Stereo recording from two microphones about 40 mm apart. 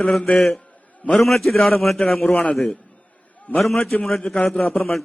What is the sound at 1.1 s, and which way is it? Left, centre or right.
A man's voice, centre.